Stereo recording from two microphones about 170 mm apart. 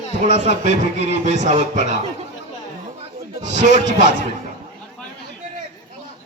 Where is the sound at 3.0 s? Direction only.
45° right (ahead or behind).